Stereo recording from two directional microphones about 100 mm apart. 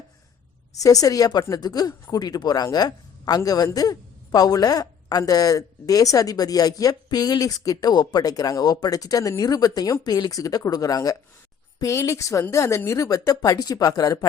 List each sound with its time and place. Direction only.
0.7 s a woman's voice: 35° left (ahead or behind)